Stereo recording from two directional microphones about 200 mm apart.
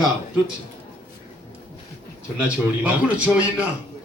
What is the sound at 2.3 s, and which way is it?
A man's voice, 5° right (ahead or behind).